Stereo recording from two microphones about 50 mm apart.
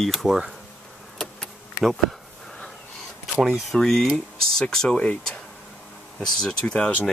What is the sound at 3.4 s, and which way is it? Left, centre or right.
Speech, centre.